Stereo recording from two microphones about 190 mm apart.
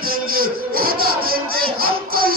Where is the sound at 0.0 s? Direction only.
50° right (ahead or behind).